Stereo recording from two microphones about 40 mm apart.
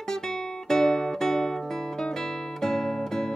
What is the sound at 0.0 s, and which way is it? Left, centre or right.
Music, centre.